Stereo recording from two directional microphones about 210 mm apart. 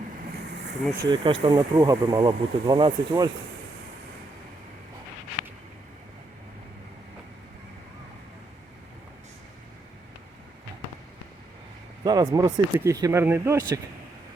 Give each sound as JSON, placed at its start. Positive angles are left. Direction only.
{"t": 1.0, "sound": "speech", "side_deg": -20}
{"t": 12.0, "sound": "speech", "side_deg": -20}